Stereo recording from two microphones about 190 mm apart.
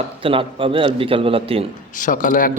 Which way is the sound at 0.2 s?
30° right (ahead or behind).